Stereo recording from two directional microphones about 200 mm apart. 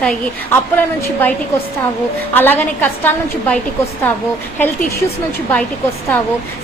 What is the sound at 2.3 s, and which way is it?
A woman's voice, 10° left (ahead or behind).